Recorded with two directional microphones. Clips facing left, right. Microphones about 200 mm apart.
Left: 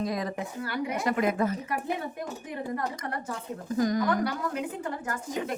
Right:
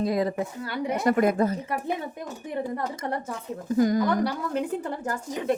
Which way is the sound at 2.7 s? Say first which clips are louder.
Right 3 dB; 25° right (ahead or behind).